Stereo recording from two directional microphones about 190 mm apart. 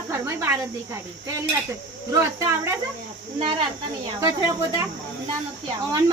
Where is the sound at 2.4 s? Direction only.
15° right (ahead or behind).